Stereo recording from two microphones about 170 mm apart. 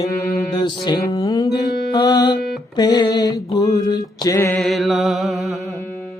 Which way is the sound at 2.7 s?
25° left (ahead or behind).